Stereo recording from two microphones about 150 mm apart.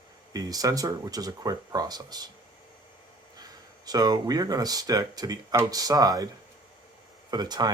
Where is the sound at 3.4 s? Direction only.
25° right (ahead or behind).